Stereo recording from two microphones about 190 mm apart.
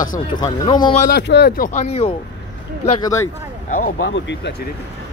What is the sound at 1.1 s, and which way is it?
Speech, 60° left (ahead or behind).